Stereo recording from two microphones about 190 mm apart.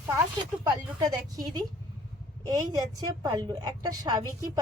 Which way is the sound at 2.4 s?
20° right (ahead or behind).